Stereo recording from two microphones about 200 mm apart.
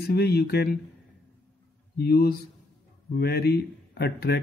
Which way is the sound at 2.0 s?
50° left (ahead or behind).